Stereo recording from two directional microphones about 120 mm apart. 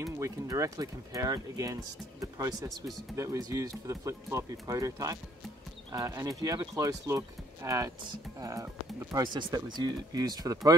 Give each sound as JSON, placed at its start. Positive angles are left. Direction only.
{"t": 0.0, "sound": "speech", "side_deg": -25}
{"t": 9.1, "sound": "speech", "side_deg": -40}